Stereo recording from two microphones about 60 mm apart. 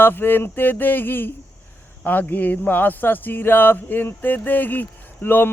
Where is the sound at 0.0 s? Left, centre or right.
Left.